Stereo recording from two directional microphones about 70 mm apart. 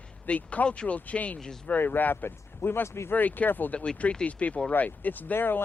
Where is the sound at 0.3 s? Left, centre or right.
Centre; by 3.2 s left.